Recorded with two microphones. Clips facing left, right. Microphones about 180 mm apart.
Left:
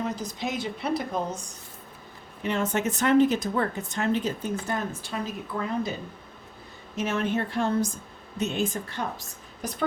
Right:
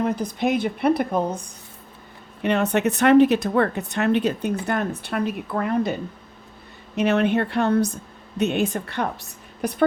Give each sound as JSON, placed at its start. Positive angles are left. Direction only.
{"t": 0.0, "sound": "a woman's voice", "side_deg": -60}
{"t": 2.4, "sound": "a woman's voice", "side_deg": -65}